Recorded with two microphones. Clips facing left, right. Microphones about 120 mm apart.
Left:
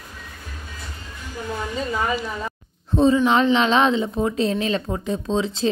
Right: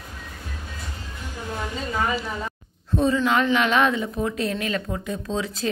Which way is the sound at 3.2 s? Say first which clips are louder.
Left 3 dB; 20° left (ahead or behind).